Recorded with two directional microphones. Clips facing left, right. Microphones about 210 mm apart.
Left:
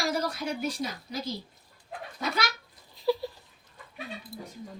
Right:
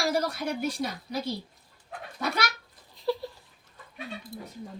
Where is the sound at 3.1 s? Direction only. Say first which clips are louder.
Left 2 dB; 5° left (ahead or behind).